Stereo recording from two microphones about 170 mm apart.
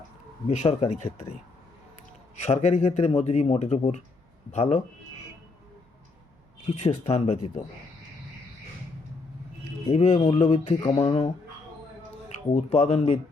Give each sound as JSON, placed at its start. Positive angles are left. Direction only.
{"t": 0.4, "sound": "speech", "side_deg": 40}
{"t": 2.4, "sound": "speech", "side_deg": 40}
{"t": 6.8, "sound": "speech", "side_deg": 40}
{"t": 9.8, "sound": "speech", "side_deg": 40}
{"t": 10.2, "sound": "speech", "side_deg": 25}
{"t": 10.4, "sound": "speech", "side_deg": 40}
{"t": 12.3, "sound": "speech", "side_deg": 40}